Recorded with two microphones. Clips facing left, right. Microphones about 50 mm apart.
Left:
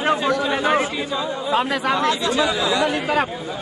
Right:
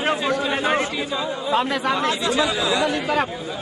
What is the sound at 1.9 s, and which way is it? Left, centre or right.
Speech, right.